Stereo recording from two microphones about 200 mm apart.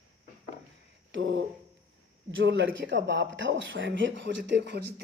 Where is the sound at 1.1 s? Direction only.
70° right (ahead or behind).